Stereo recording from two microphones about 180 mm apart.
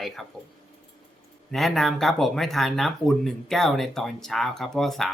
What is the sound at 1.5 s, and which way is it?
Speech, centre (ahead or behind).